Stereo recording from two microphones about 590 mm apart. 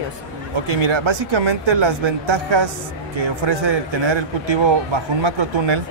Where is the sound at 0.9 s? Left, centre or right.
Right.